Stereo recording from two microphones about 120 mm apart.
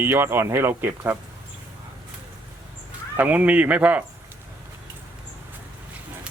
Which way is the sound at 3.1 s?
15° right (ahead or behind).